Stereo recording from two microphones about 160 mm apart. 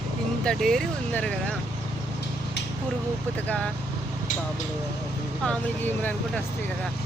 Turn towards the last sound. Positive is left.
turn(degrees=10)  # may be behind; listen again after turning